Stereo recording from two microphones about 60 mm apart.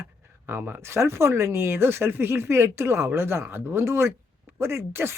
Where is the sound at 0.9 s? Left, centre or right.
Right.